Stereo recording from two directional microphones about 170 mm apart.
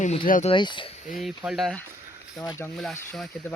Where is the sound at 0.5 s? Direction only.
30° left (ahead or behind).